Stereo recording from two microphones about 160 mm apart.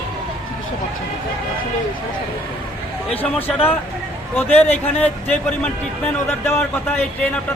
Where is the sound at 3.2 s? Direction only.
10° left (ahead or behind).